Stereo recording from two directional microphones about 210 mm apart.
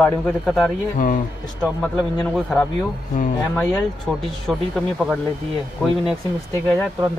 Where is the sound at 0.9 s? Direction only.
40° left (ahead or behind).